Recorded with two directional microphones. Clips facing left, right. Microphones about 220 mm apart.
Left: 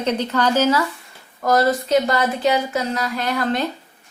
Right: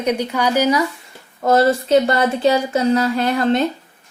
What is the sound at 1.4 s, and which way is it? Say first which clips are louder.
Speech: right 3 dB; 25° right (ahead or behind).